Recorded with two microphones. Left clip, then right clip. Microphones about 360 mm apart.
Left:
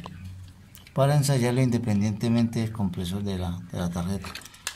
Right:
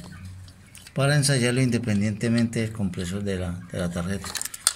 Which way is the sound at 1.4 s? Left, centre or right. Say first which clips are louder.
Right 2 dB; centre.